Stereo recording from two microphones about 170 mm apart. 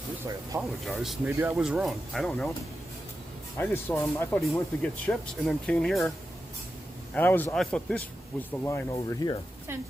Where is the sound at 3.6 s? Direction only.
15° left (ahead or behind).